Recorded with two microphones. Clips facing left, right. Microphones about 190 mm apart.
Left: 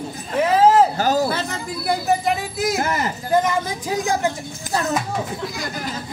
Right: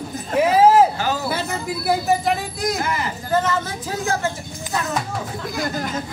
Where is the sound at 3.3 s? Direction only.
15° left (ahead or behind).